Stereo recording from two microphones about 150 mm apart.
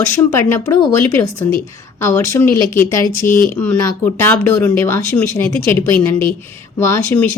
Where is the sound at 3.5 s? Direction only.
10° left (ahead or behind).